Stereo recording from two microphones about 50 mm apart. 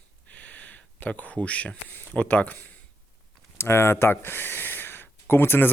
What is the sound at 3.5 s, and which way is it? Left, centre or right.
Speech, left.